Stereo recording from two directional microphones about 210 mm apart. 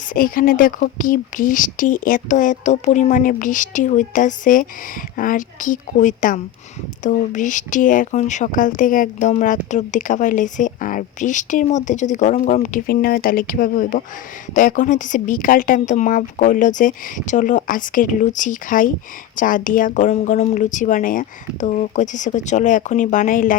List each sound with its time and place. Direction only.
0.1 s speech: 40° left (ahead or behind)